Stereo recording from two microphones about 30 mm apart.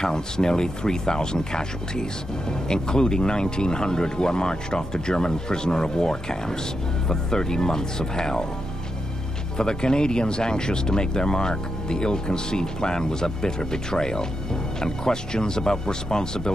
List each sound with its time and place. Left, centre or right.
0.0 s speech: left
9.6 s speech: left